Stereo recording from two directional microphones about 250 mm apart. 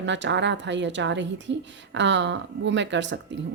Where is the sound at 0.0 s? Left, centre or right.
Right.